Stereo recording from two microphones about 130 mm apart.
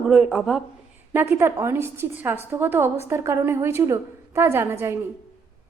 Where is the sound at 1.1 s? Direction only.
15° right (ahead or behind).